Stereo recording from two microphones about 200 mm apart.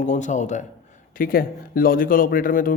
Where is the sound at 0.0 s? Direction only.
35° left (ahead or behind).